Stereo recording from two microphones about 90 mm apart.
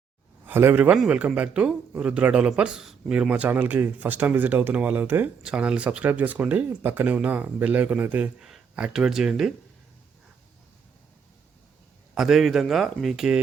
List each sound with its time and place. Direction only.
0.4 s speech: 25° right (ahead or behind)
0.9 s speech: 10° right (ahead or behind)
5.5 s speech: 10° right (ahead or behind)
8.4 s a sound: 5° right (ahead or behind)
8.7 s speech: 10° right (ahead or behind)
12.1 s speech: 5° right (ahead or behind)